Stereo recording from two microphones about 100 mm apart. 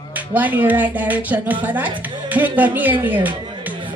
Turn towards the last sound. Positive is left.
turn(degrees=-15)  # may be behind; listen again after turning